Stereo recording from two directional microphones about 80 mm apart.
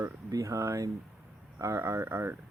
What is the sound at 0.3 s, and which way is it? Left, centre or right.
Speech, right.